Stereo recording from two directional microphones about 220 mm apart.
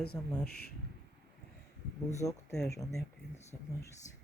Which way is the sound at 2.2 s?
15° left (ahead or behind).